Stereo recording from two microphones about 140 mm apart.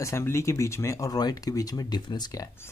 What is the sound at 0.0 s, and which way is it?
Speech, 20° left (ahead or behind).